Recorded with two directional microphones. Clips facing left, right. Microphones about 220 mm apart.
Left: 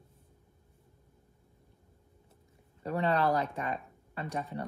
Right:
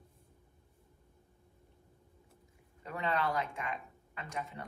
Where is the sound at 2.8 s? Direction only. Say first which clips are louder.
Left 6 dB; 35° left (ahead or behind).